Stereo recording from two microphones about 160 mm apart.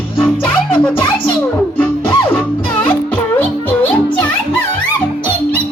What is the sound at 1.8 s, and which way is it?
Music, 10° left (ahead or behind).